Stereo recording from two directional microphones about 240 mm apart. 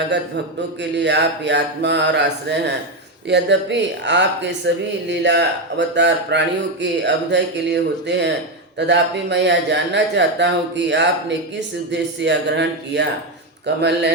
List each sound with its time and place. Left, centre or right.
0.8 s speech: right